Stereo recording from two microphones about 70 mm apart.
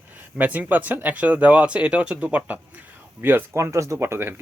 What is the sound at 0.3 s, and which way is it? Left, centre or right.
Speech, right.